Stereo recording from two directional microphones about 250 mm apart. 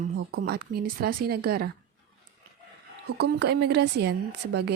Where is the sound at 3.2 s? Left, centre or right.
Right.